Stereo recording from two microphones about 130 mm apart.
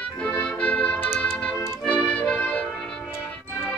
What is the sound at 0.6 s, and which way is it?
Music, 10° left (ahead or behind).